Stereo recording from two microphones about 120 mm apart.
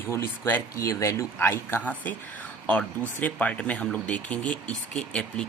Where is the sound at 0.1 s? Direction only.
20° left (ahead or behind).